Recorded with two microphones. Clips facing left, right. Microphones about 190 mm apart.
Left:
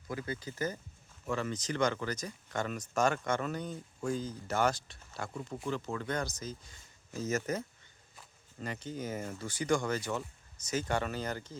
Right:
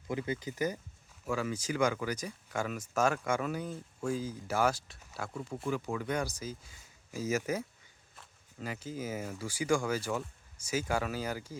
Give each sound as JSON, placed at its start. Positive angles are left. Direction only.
{"t": 0.1, "sound": "speech", "side_deg": -20}